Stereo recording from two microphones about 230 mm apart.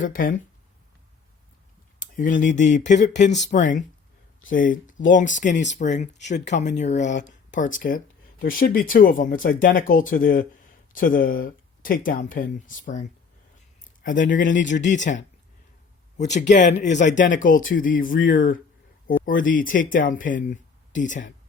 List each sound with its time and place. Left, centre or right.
0.0 s speech: left
2.0 s a sound: left
2.6 s speech: left
16.3 s speech: left